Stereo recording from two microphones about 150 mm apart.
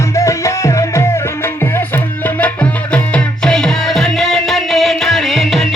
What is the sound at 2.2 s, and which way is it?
Music, 10° left (ahead or behind).